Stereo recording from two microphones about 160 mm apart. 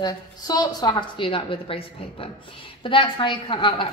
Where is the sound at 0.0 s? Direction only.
25° left (ahead or behind).